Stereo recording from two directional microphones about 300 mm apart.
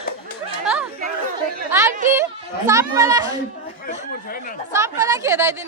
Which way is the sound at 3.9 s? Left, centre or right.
Left.